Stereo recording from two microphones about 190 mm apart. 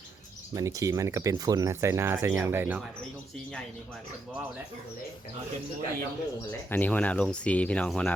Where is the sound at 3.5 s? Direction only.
5° left (ahead or behind).